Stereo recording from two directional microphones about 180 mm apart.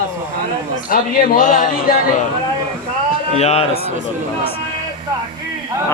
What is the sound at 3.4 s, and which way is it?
Speech, 35° left (ahead or behind).